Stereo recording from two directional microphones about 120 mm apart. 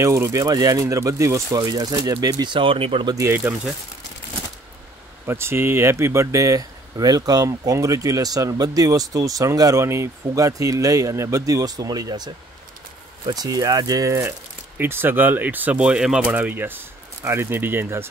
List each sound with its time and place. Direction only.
0.0 s speech: 25° right (ahead or behind); by 3.1 s 50° right (ahead or behind)
3.1 s speech: 25° right (ahead or behind)
5.2 s speech: 20° right (ahead or behind)
13.3 s speech: 30° right (ahead or behind)